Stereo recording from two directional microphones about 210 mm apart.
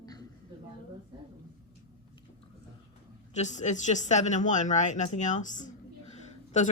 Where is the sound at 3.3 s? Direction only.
35° left (ahead or behind).